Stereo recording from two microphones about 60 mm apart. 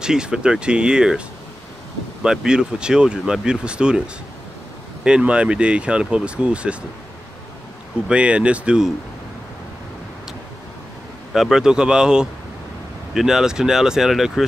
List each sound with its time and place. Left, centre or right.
0.0 s speech: centre
2.4 s speech: centre
5.0 s speech: centre
8.1 s speech: centre
11.3 s speech: centre